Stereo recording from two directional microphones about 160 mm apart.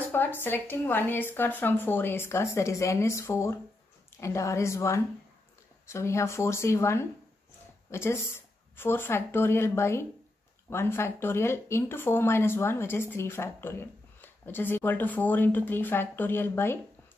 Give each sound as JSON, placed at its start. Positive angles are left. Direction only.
{"t": 0.1, "sound": "a woman's voice", "side_deg": 15}